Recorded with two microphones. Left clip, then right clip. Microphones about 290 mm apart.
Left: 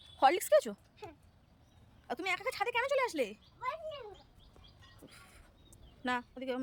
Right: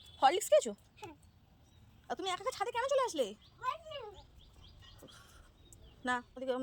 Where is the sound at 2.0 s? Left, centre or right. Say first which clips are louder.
Left 2 dB; centre.